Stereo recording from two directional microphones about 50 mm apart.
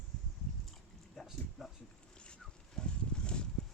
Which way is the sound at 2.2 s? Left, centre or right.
Centre.